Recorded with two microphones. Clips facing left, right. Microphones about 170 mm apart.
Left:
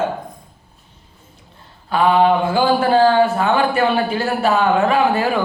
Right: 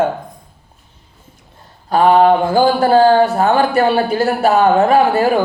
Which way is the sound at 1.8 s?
40° right (ahead or behind).